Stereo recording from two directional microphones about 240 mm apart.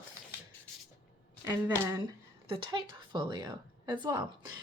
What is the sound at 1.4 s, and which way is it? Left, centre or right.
A woman's voice, centre.